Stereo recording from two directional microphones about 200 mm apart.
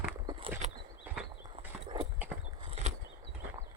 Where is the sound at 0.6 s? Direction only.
35° right (ahead or behind).